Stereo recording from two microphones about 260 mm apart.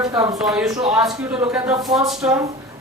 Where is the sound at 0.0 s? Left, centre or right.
Centre.